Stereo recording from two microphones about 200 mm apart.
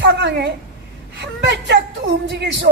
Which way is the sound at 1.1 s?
60° right (ahead or behind).